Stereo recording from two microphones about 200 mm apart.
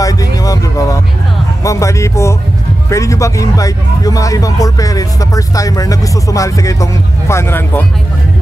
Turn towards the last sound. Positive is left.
turn(degrees=10)  # may be behind; listen again after turning